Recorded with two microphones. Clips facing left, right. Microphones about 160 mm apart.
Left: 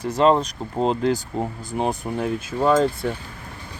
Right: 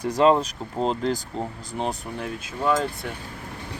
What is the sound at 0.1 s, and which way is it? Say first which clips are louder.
Speech: left 1 dB; 5° right (ahead or behind).